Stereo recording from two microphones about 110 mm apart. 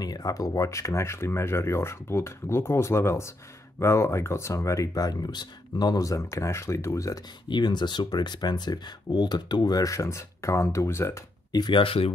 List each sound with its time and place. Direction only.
0.0 s speech: 35° left (ahead or behind)
7.4 s speech: 45° left (ahead or behind); by 11.2 s 25° left (ahead or behind)
11.5 s speech: 45° left (ahead or behind)